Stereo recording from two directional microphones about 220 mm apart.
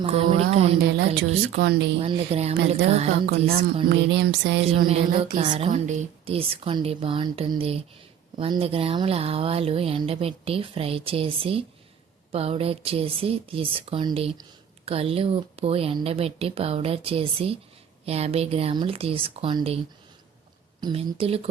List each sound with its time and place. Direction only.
0.0 s speech: 25° right (ahead or behind)
1.5 s music: 45° right (ahead or behind)
2.0 s speech: 30° right (ahead or behind)
3.2 s music: 45° right (ahead or behind)
4.9 s speech: 25° right (ahead or behind)
20.8 s speech: 25° right (ahead or behind)